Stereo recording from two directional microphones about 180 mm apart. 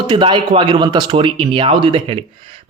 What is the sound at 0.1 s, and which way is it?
Speech, 25° right (ahead or behind).